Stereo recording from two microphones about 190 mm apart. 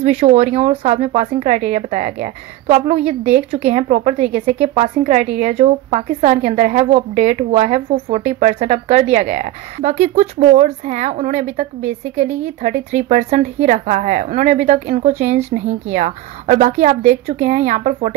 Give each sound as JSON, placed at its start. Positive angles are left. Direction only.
{"t": 0.2, "sound": "speech", "side_deg": -35}